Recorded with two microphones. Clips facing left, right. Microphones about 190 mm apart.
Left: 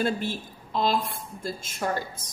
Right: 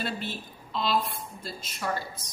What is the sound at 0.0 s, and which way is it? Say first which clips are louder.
A woman's voice: left 6 dB; 50° left (ahead or behind).